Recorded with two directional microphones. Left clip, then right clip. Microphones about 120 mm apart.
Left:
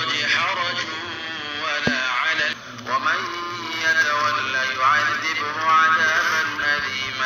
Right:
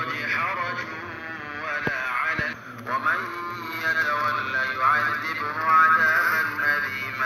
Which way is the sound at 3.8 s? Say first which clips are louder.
Left 4 dB; 30° left (ahead or behind).